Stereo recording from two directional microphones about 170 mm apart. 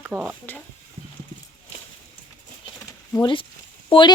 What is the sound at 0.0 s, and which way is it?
Stir, 10° right (ahead or behind).